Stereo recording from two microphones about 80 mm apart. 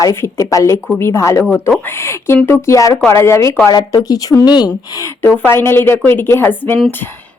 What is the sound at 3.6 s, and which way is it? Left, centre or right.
Speech, left.